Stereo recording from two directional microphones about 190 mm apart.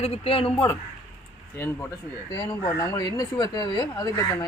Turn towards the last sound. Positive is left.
turn(degrees=20)  # may be behind; listen again after turning